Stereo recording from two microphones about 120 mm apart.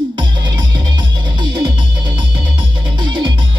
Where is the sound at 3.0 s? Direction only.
40° right (ahead or behind).